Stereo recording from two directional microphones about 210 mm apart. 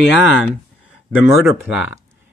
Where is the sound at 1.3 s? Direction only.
5° right (ahead or behind).